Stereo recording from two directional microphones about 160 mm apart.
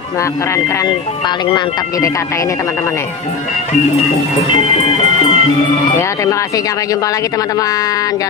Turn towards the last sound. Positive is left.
turn(degrees=20)  # may be behind; listen again after turning